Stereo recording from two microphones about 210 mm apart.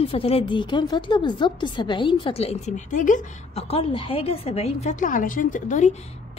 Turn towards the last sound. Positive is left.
turn(degrees=35)  # may be behind; listen again after turning